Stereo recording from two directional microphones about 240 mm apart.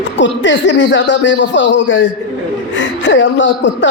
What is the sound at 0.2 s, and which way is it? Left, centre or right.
A man's voice, left.